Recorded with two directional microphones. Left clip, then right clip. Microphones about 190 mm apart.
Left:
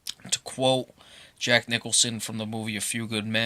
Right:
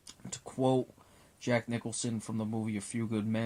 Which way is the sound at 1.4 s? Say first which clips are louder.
Left 10 dB; 15° left (ahead or behind).